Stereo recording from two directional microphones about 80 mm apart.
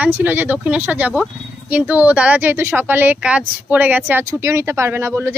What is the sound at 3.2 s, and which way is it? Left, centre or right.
Speech, centre.